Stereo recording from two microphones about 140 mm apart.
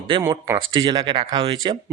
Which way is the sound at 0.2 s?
20° right (ahead or behind).